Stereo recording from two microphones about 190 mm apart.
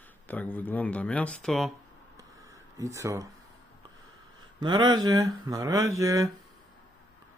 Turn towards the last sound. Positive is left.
turn(degrees=-15)  # may be behind; listen again after turning